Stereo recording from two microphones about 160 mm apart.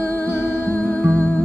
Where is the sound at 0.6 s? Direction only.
10° left (ahead or behind).